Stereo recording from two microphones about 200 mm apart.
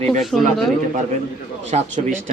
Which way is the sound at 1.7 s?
35° right (ahead or behind).